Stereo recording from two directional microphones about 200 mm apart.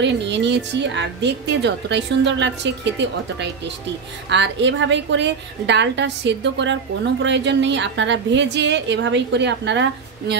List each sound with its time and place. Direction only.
0.0 s a woman's voice: 60° right (ahead or behind)